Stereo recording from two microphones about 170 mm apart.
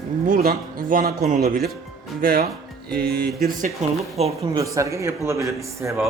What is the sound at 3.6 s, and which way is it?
Speech, 40° right (ahead or behind).